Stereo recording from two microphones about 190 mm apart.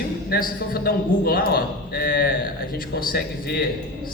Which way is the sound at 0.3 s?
50° left (ahead or behind).